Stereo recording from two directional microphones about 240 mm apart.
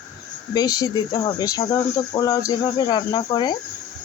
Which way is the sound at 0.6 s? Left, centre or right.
Centre.